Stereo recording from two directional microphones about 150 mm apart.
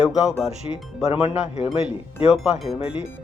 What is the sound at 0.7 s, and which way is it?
Speech, 40° left (ahead or behind).